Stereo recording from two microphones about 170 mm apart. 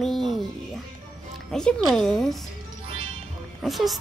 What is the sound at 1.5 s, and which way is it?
Speech, 5° left (ahead or behind).